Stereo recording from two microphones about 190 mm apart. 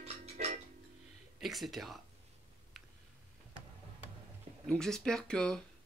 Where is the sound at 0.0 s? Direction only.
35° right (ahead or behind).